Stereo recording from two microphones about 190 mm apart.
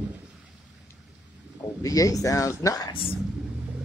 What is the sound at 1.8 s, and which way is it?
Speech, 20° left (ahead or behind).